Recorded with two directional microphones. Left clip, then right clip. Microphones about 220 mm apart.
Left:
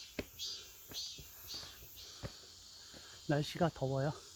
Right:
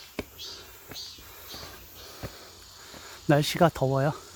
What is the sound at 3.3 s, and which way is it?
Speech, 25° right (ahead or behind).